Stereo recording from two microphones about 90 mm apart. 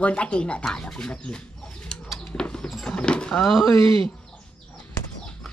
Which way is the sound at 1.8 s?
10° left (ahead or behind).